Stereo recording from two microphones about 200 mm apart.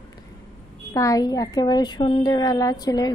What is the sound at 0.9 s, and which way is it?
A woman's voice, 15° left (ahead or behind).